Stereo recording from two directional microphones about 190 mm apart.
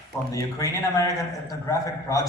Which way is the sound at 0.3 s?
15° left (ahead or behind).